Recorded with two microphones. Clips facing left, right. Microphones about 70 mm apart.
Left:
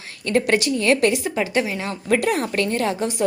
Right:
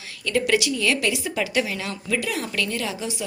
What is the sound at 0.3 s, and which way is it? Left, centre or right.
A woman's voice, left.